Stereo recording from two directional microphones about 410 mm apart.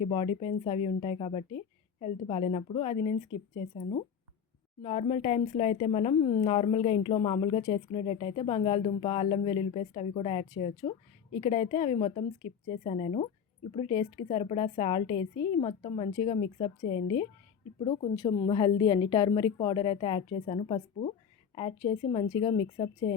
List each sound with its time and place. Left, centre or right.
0.1 s speech: centre
4.8 s speech: centre